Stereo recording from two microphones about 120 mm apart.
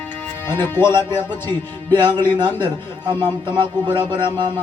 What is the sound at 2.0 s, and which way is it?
Speech, 40° right (ahead or behind).